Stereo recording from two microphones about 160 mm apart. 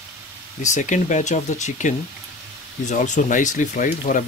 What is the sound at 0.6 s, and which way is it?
Speech, 50° left (ahead or behind).